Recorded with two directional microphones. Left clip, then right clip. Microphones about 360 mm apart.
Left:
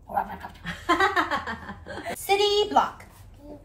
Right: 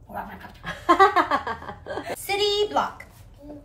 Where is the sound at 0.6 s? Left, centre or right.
Right.